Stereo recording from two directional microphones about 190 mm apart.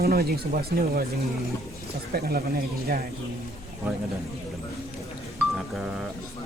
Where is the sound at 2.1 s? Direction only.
55° right (ahead or behind).